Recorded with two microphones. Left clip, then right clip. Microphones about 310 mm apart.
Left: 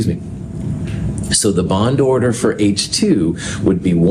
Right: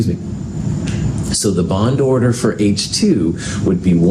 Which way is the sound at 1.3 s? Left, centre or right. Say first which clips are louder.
Left 2 dB; left.